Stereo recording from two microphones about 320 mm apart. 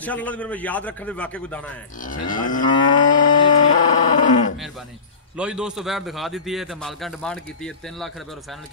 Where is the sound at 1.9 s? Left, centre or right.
Left.